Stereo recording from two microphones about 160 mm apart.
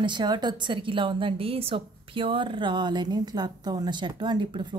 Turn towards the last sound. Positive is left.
turn(degrees=-30)  # may be behind; listen again after turning